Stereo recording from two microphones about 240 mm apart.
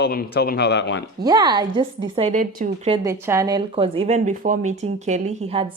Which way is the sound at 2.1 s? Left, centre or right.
Right.